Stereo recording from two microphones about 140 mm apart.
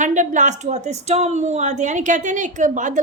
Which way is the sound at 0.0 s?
65° right (ahead or behind).